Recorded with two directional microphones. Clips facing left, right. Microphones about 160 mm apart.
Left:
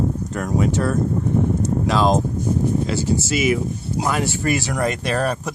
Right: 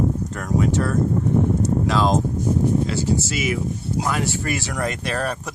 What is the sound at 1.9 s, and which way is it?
Speech, 15° left (ahead or behind).